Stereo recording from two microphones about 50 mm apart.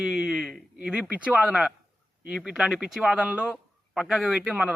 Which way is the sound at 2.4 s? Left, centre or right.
Centre.